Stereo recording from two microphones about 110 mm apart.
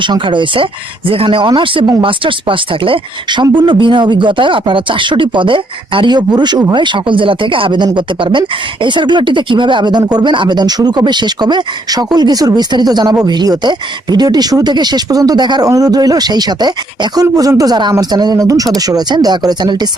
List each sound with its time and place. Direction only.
0.0 s speech: 45° right (ahead or behind)